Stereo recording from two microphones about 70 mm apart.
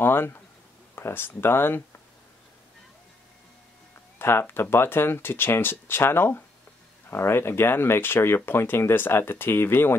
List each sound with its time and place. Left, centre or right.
0.0 s speech: left
4.2 s speech: left